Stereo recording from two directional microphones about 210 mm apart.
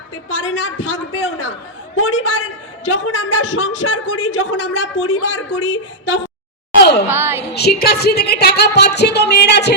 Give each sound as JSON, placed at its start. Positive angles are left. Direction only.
{"t": 0.3, "sound": "a man's voice", "side_deg": 65}
{"t": 7.1, "sound": "a sound", "side_deg": -10}
{"t": 7.5, "sound": "a woman's voice", "side_deg": 50}